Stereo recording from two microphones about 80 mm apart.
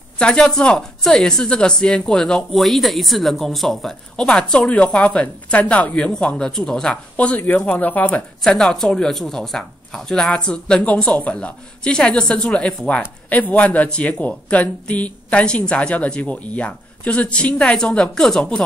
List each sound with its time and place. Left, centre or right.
0.2 s speech: centre
8.4 s speech: centre